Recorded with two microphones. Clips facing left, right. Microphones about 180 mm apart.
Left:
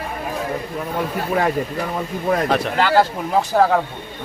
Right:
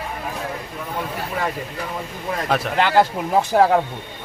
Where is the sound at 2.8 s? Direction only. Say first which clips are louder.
Right 1 dB; 20° right (ahead or behind).